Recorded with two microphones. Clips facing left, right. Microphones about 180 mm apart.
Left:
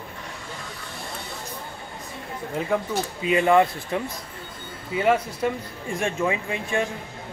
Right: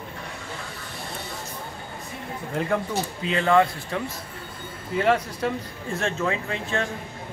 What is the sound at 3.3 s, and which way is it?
Speech, 15° left (ahead or behind).